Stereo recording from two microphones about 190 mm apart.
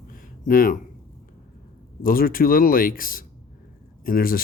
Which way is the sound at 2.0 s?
50° left (ahead or behind).